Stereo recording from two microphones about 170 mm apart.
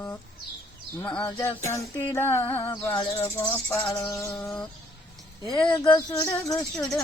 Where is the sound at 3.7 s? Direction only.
10° left (ahead or behind).